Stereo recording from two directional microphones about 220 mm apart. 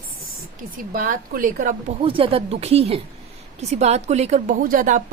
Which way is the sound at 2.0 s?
25° right (ahead or behind).